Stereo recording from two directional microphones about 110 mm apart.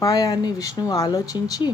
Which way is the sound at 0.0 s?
35° left (ahead or behind).